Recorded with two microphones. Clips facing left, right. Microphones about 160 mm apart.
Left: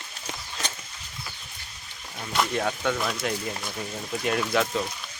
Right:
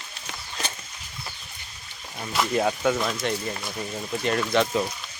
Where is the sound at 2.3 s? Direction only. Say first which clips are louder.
Right 2 dB; 5° right (ahead or behind).